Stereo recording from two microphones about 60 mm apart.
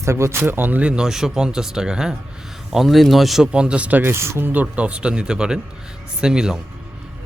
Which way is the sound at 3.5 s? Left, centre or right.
Centre.